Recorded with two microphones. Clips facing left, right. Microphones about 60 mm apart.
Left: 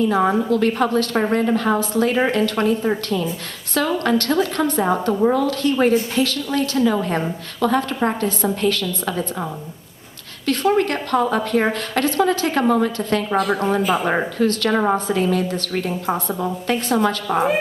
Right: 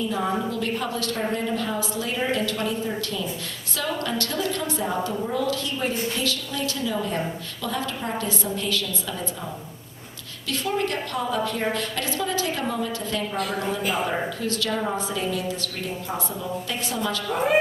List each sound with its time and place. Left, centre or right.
0.1 s a woman's voice: left
10.4 s a woman's voice: left